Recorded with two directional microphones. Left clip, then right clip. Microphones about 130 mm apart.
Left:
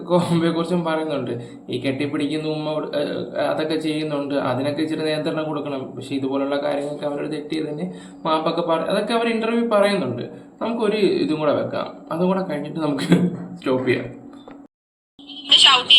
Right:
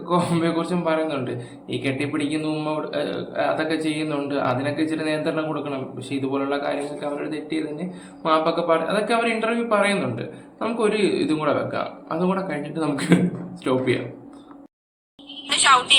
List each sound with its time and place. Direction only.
0.0 s a man's voice: centre (ahead or behind)
8.2 s speech: 5° right (ahead or behind)
15.5 s a woman's voice: 20° left (ahead or behind)